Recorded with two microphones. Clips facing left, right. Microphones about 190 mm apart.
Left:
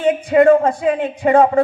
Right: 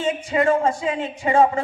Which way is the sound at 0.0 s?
60° left (ahead or behind).